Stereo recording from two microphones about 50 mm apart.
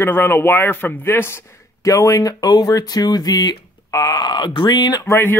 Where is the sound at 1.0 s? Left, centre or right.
Left.